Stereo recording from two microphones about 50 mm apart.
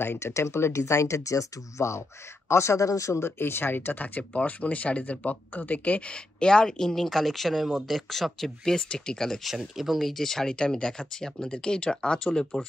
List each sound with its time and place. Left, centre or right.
0.0 s speech: left
0.3 s speech: left
4.2 s speech: left; by 9.5 s centre
9.5 s speech: centre